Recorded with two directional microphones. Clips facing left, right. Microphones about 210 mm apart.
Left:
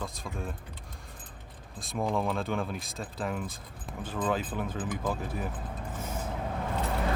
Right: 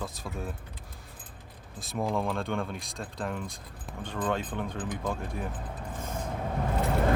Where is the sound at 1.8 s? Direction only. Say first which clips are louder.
Even; centre (ahead or behind).